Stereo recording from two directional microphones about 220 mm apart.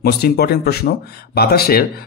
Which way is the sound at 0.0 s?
45° left (ahead or behind).